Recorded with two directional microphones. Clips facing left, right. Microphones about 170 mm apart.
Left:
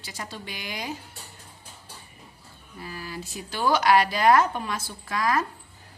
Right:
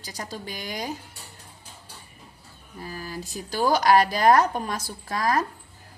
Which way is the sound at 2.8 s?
40° right (ahead or behind).